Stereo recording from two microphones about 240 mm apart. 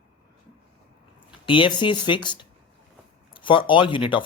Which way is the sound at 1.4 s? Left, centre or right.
Left.